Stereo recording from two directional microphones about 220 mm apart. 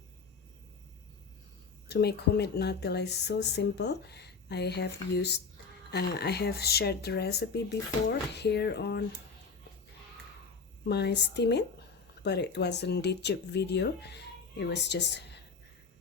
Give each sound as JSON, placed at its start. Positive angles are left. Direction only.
{"t": 1.9, "sound": "speech", "side_deg": 50}
{"t": 10.8, "sound": "speech", "side_deg": 50}